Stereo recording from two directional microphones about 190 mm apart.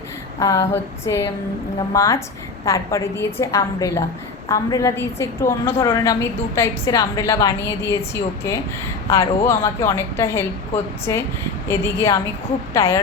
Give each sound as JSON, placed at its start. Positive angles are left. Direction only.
{"t": 0.3, "sound": "a woman's voice", "side_deg": 15}